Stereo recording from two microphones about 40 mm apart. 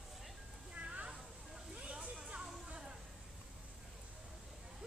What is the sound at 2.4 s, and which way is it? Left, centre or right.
Music, right.